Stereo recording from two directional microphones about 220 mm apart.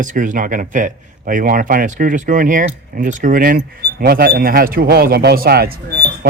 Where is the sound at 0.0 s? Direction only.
35° right (ahead or behind).